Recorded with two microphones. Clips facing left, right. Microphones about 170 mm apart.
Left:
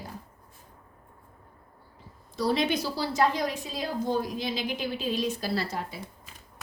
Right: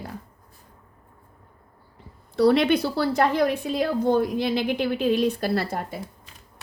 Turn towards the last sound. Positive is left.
turn(degrees=-55)  # may be behind; listen again after turning